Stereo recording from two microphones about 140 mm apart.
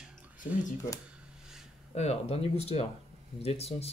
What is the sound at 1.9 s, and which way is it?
Speech, 50° left (ahead or behind).